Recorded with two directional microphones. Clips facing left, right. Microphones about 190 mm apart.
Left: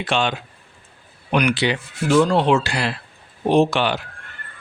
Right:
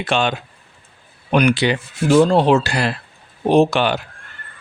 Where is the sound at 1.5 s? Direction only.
45° right (ahead or behind).